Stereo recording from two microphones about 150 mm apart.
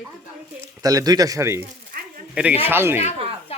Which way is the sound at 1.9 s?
70° right (ahead or behind).